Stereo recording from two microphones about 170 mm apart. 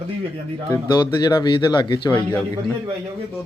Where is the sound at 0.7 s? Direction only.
25° left (ahead or behind).